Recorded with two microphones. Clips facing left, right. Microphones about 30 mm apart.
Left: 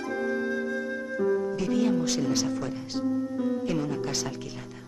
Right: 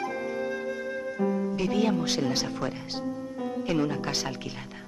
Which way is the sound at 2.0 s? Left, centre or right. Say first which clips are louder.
Left 1 dB; right.